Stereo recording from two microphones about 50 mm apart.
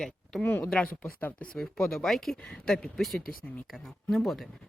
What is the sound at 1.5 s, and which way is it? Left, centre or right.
Speech, centre.